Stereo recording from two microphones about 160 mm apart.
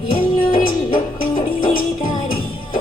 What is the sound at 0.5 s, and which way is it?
Music, 60° left (ahead or behind).